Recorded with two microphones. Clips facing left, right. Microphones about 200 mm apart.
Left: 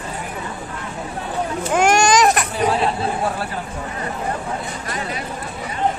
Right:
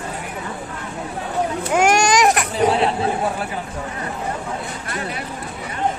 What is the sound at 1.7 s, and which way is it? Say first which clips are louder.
Baby cry: left 1 dB; 10° right (ahead or behind).